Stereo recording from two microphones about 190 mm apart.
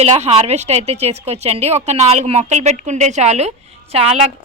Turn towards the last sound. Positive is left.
turn(degrees=-35)  # may be behind; listen again after turning